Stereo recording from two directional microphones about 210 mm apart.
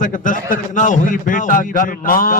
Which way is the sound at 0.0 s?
40° left (ahead or behind).